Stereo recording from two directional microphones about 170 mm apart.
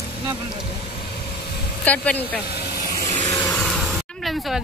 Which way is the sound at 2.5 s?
65° left (ahead or behind).